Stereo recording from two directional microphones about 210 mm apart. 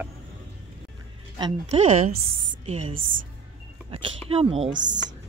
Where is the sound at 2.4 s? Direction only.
25° right (ahead or behind).